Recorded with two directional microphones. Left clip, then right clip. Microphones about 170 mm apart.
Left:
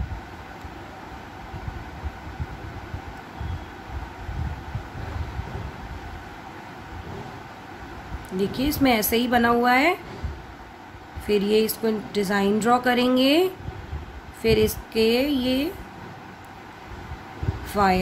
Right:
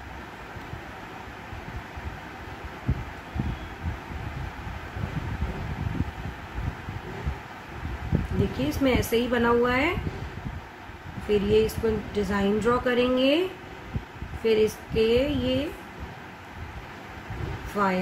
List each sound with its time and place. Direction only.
8.5 s speech: 60° left (ahead or behind)
11.2 s speech: 60° left (ahead or behind)
14.4 s speech: 60° left (ahead or behind)